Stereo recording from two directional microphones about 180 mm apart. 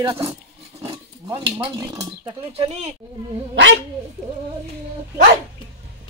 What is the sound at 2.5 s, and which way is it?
Speech, 35° right (ahead or behind).